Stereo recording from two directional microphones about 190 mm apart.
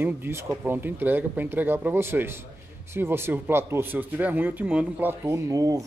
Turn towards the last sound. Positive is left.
turn(degrees=-15)  # may be behind; listen again after turning